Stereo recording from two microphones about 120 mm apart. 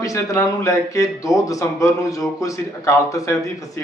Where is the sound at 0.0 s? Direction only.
25° left (ahead or behind).